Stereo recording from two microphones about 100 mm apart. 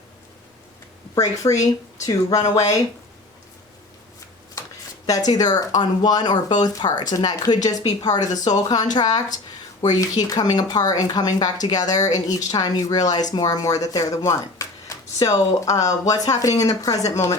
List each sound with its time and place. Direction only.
1.1 s speech: 35° left (ahead or behind)
5.0 s speech: 35° left (ahead or behind)